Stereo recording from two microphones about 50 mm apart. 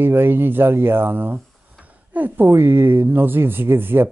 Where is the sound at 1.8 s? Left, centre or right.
Right.